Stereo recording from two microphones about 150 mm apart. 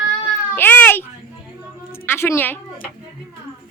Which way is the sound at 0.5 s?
10° left (ahead or behind).